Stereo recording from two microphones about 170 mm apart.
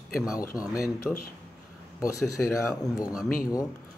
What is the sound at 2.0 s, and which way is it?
Speech, 20° left (ahead or behind).